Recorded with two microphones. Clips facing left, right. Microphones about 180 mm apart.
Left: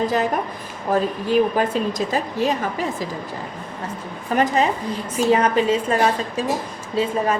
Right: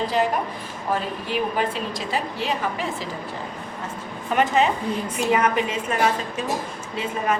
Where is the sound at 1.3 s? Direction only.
45° left (ahead or behind).